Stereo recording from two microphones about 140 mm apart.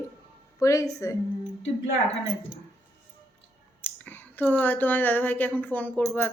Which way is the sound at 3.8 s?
15° left (ahead or behind).